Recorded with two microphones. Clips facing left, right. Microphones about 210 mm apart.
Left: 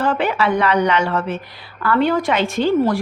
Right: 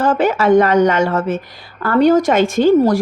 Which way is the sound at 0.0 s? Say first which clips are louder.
Right 4 dB; 45° right (ahead or behind).